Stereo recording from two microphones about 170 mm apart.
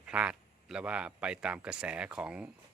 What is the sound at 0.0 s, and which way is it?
A man's voice, 5° right (ahead or behind).